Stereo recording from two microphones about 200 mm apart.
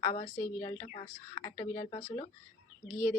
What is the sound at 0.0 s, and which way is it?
Speech, 30° left (ahead or behind).